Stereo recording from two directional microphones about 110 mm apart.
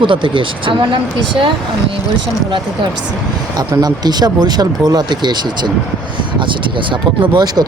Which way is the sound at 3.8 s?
40° right (ahead or behind).